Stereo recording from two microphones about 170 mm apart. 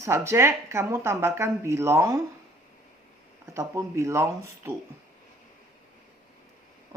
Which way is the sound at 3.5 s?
15° right (ahead or behind).